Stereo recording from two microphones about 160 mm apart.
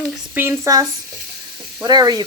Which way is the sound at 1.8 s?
25° right (ahead or behind).